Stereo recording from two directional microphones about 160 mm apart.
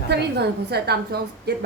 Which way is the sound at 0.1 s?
90° right.